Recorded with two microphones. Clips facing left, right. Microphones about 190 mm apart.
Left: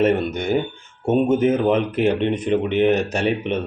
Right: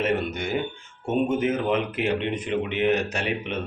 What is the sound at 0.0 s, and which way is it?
Speech, 45° left (ahead or behind).